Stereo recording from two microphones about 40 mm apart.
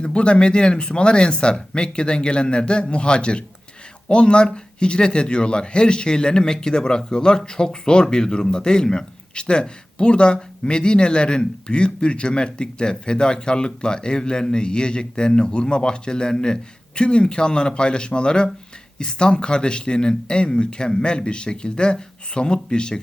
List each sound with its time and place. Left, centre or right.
0.0 s speech: left